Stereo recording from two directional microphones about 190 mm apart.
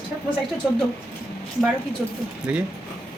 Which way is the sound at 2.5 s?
5° right (ahead or behind).